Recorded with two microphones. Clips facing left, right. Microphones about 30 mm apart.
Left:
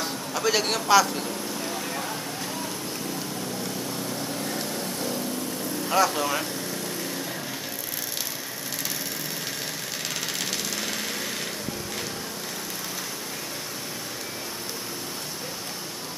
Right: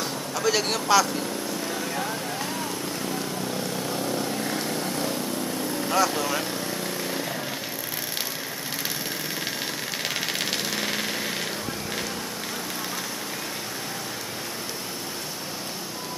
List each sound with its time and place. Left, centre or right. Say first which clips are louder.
0.0 s a man's voice: right 1 dB; centre
1.2 s vehicle: right 2 dB; centre
3.9 s vehicle: right 4 dB; right
5.9 s speech: left 1 dB; centre
10.2 s a sound: right 2 dB; right